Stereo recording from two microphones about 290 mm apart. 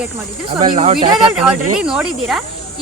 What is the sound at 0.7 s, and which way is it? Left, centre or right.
Speech, right.